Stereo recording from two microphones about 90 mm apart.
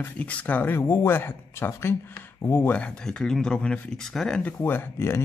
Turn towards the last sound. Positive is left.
turn(degrees=25)  # may be behind; listen again after turning